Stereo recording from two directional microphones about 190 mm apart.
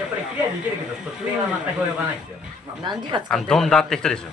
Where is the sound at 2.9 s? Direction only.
25° right (ahead or behind).